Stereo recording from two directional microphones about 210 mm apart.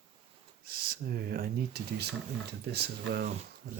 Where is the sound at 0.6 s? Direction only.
45° right (ahead or behind).